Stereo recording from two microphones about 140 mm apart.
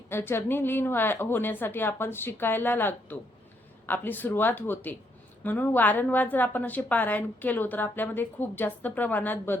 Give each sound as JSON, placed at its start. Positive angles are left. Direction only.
{"t": 0.1, "sound": "a woman's voice", "side_deg": 15}